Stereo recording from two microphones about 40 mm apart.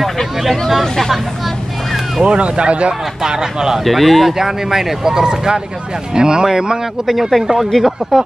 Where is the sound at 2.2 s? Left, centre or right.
Right.